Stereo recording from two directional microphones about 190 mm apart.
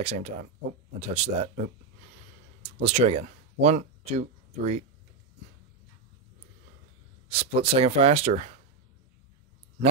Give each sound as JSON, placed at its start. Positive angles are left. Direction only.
{"t": 0.0, "sound": "speech", "side_deg": -35}
{"t": 2.6, "sound": "speech", "side_deg": -35}
{"t": 7.2, "sound": "speech", "side_deg": -30}